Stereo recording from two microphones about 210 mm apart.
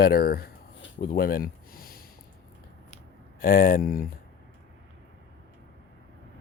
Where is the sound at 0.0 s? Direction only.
45° left (ahead or behind).